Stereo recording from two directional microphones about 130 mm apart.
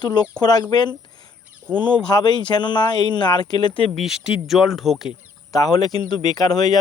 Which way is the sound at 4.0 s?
5° right (ahead or behind).